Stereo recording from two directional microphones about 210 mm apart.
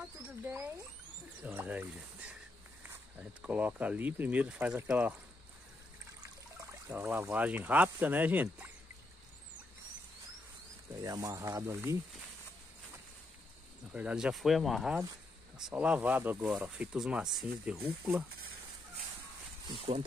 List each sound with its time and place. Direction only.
0.5 s speech: 5° right (ahead or behind)
6.9 s speech: 10° right (ahead or behind)
11.0 s speech: 15° right (ahead or behind)
13.9 s speech: 5° right (ahead or behind)